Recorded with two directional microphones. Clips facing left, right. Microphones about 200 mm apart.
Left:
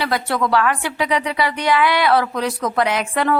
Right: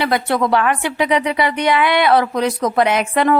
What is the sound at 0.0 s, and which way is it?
A woman's voice, 20° right (ahead or behind).